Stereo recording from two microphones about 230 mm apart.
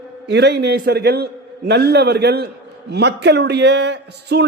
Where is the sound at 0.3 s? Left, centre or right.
Right.